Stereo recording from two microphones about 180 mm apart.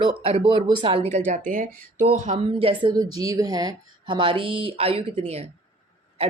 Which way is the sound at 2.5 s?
30° right (ahead or behind).